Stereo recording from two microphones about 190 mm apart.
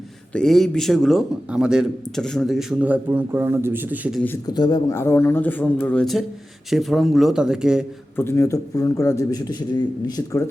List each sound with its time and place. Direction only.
0.3 s a man's voice: centre (ahead or behind)
4.4 s a man's voice: 20° left (ahead or behind); by 7.9 s 5° right (ahead or behind)
8.1 s a man's voice: 15° left (ahead or behind)